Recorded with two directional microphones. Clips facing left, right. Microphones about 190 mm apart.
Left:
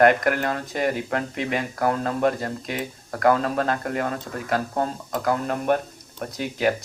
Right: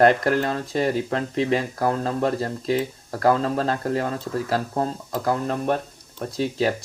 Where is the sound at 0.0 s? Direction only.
30° right (ahead or behind).